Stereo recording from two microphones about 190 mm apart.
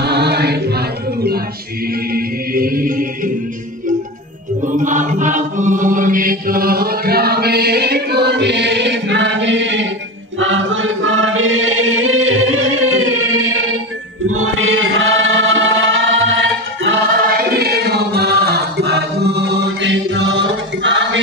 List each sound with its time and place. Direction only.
0.0 s choir: 60° right (ahead or behind)
2.1 s music: 50° right (ahead or behind)
4.7 s chant: 40° right (ahead or behind); by 9.8 s 70° right (ahead or behind)
10.4 s music: 85° right
14.2 s chant: 90° right
17.3 s choir: 55° right (ahead or behind); by 21.2 s 70° right (ahead or behind)